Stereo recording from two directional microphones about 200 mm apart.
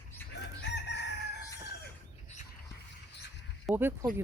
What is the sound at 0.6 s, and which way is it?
Chicken, 60° left (ahead or behind).